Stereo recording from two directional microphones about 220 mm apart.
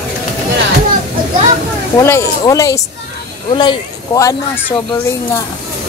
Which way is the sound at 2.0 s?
15° left (ahead or behind).